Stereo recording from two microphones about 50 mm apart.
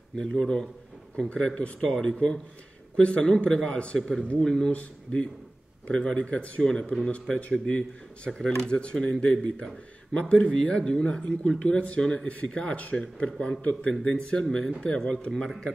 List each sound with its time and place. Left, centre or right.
0.2 s speech: centre
8.3 s speech: centre
8.6 s speech: centre
10.1 s speech: left
12.0 s speech: centre